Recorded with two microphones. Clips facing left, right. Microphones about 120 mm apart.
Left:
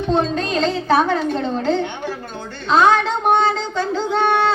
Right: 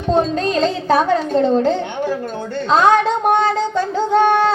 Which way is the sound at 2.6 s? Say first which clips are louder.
Right 1 dB; 40° right (ahead or behind).